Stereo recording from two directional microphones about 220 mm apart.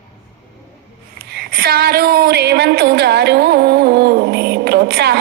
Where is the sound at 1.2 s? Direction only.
45° right (ahead or behind).